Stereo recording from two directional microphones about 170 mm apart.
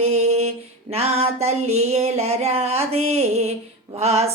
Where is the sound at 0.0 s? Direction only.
40° right (ahead or behind).